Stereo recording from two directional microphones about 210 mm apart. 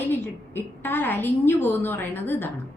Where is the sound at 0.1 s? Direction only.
10° left (ahead or behind).